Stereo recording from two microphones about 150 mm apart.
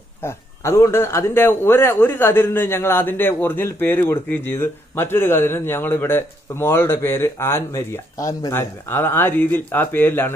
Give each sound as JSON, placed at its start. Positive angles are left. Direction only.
{"t": 0.2, "sound": "a man's voice", "side_deg": 20}